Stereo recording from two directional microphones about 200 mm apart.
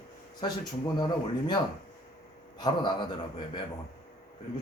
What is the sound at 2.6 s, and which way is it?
Speech, 20° left (ahead or behind).